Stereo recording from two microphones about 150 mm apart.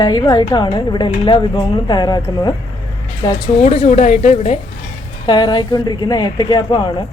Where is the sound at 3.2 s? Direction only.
30° left (ahead or behind).